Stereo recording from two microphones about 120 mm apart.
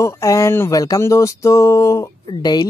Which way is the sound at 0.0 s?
25° left (ahead or behind).